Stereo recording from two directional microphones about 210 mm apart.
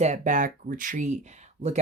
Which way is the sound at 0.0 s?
35° right (ahead or behind).